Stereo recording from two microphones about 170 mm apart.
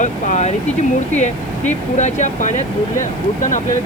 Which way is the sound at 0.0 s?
45° left (ahead or behind).